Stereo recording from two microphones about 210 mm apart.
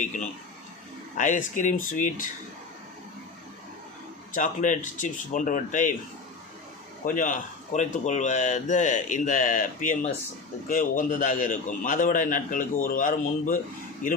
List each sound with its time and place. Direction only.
0.0 s a man's voice: 35° left (ahead or behind)
4.4 s a man's voice: 35° left (ahead or behind)
7.0 s a man's voice: 40° left (ahead or behind)